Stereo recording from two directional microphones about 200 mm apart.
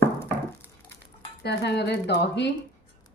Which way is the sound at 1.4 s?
55° left (ahead or behind).